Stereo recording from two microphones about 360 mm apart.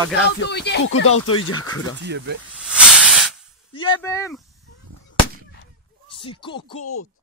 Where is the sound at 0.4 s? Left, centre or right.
Left.